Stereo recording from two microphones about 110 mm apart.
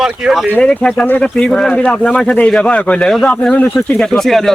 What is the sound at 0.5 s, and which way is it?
Speech, 5° left (ahead or behind).